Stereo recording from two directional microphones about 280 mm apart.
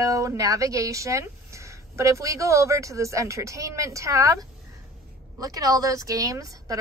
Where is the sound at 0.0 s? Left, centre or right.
Centre.